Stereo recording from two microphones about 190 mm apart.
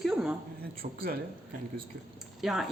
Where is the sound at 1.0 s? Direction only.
50° right (ahead or behind).